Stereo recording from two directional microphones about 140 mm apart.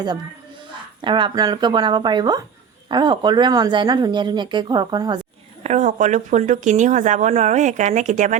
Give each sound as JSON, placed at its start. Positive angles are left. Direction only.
{"t": 1.0, "sound": "speech", "side_deg": -35}
{"t": 5.6, "sound": "speech", "side_deg": -60}